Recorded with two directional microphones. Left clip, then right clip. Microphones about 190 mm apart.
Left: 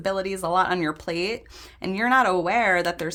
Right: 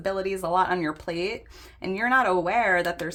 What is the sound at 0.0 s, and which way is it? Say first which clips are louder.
Speech: left 2 dB; 25° left (ahead or behind).